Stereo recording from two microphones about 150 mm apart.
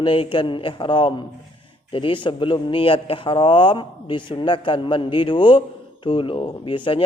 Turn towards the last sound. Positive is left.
turn(degrees=35)  # may be behind; listen again after turning